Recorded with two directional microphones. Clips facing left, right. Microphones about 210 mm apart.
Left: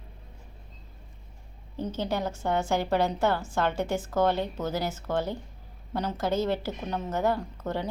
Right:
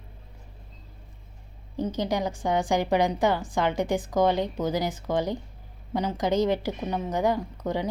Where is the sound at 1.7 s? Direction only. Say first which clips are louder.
Right 3 dB; 15° right (ahead or behind).